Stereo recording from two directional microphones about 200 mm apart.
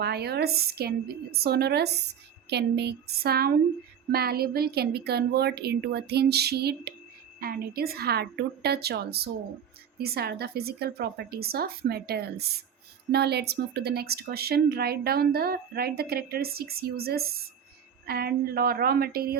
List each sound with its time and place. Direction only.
0.0 s a woman's voice: 55° right (ahead or behind)